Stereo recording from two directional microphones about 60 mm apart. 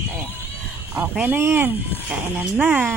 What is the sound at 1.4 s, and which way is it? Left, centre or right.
Speech, right.